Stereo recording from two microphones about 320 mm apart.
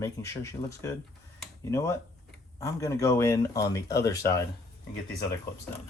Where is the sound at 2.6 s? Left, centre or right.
Centre.